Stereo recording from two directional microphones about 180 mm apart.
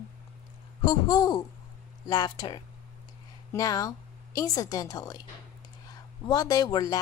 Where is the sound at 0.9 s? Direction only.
20° left (ahead or behind).